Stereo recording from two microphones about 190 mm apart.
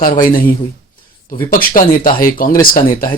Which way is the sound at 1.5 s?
50° left (ahead or behind).